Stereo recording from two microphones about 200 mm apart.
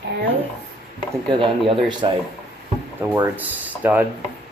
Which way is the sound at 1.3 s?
25° right (ahead or behind).